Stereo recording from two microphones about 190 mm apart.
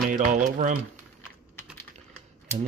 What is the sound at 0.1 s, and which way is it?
Speech, 40° right (ahead or behind).